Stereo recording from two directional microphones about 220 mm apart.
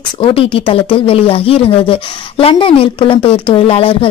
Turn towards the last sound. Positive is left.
turn(degrees=25)  # may be behind; listen again after turning